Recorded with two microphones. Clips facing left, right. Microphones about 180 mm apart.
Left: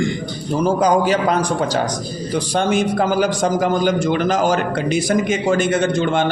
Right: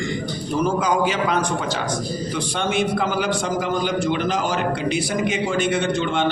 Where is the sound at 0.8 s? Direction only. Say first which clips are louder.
Left 5 dB; 40° left (ahead or behind).